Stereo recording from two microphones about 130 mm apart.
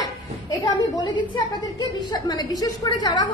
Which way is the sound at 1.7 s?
30° left (ahead or behind).